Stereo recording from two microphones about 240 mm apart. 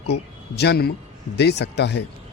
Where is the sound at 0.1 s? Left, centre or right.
Left.